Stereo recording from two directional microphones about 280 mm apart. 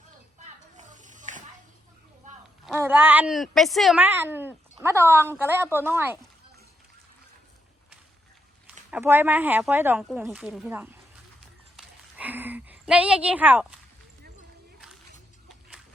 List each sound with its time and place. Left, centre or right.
0.8 s snake: right
2.6 s speech: centre
8.9 s speech: centre
11.8 s a sound: centre